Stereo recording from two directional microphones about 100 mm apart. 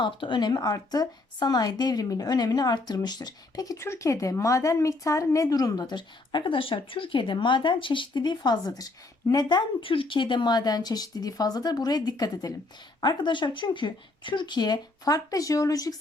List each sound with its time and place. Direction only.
0.0 s speech: 50° left (ahead or behind)
13.0 s speech: 50° left (ahead or behind)